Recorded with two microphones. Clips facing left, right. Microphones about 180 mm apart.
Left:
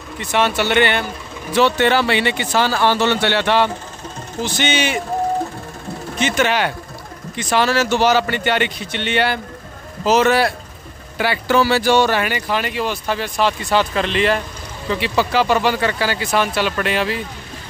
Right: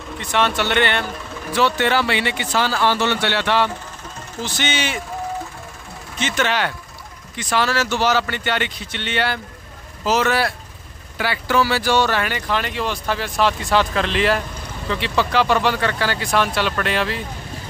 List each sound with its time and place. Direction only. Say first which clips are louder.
0.3 s speech: left 2 dB; 5° left (ahead or behind)
1.5 s speech: left 3 dB; 25° left (ahead or behind)
6.2 s speech: left 3 dB; 10° left (ahead or behind)
7.3 s speech: left 3 dB; 20° left (ahead or behind); by 17.2 s 5° left (ahead or behind)